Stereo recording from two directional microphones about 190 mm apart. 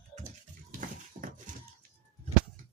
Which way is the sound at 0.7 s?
45° right (ahead or behind).